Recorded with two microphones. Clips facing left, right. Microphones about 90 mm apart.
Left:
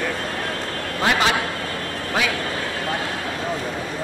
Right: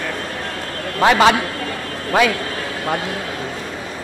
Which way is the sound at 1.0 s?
85° right.